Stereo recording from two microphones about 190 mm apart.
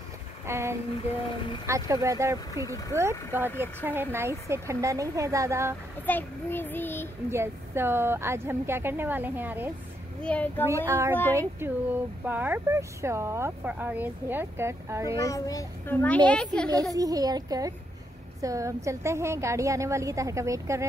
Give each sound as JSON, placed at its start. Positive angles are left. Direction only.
{"t": 0.5, "sound": "speech", "side_deg": -15}
{"t": 6.0, "sound": "child singing", "side_deg": 10}
{"t": 7.2, "sound": "speech", "side_deg": -15}
{"t": 10.2, "sound": "child singing", "side_deg": 10}
{"t": 10.9, "sound": "speech", "side_deg": -15}
{"t": 15.1, "sound": "child singing", "side_deg": 20}
{"t": 16.3, "sound": "speech", "side_deg": 5}
{"t": 16.9, "sound": "a woman's voice", "side_deg": -20}